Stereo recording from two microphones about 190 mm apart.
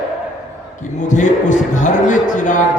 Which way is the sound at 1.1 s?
40° left (ahead or behind).